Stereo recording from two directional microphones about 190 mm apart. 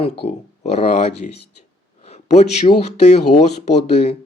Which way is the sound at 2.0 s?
35° left (ahead or behind).